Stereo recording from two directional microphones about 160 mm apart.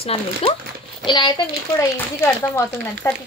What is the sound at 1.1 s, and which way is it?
Speech, 30° left (ahead or behind).